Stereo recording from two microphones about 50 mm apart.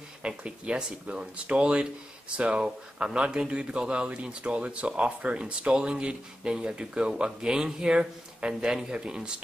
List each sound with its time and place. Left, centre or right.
0.4 s speech: right